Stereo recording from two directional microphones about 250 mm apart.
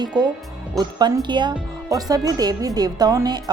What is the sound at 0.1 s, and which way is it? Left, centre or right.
A woman's voice, centre.